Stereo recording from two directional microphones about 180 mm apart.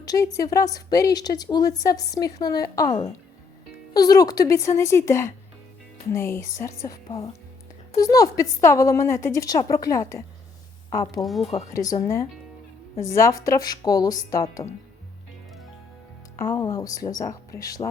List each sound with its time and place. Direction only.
0.0 s a woman's voice: 20° left (ahead or behind)
16.4 s a woman's voice: 15° left (ahead or behind)